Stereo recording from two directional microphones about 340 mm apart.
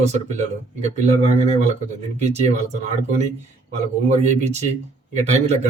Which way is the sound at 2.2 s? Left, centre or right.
Centre.